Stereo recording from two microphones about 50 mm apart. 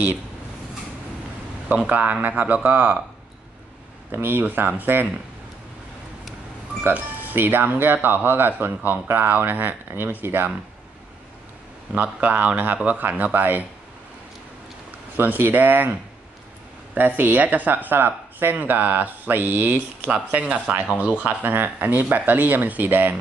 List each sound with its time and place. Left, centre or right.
1.9 s speech: right
4.1 s speech: right
6.9 s speech: right
11.9 s speech: right
15.1 s speech: right
20.3 s speech: right
21.2 s speech: right